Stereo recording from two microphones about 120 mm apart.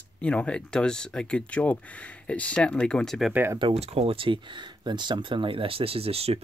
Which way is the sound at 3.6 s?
60° right (ahead or behind).